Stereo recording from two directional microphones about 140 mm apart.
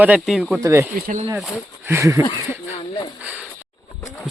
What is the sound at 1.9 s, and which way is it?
Speech, 20° right (ahead or behind).